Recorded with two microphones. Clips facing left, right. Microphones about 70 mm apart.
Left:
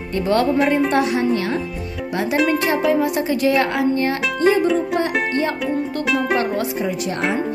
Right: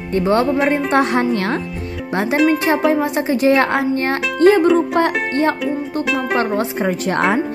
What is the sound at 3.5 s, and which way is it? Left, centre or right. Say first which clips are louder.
Speech: right 3 dB; right.